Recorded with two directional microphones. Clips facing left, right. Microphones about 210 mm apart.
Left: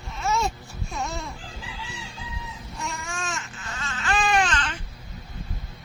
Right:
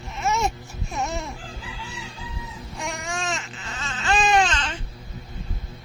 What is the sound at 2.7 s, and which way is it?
Babbling, 90° right.